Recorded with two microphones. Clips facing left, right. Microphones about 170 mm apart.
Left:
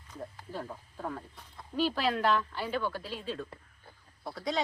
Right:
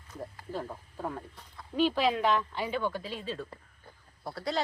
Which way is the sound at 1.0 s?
5° right (ahead or behind).